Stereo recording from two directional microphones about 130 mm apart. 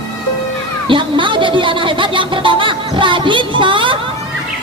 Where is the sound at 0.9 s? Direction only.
40° right (ahead or behind).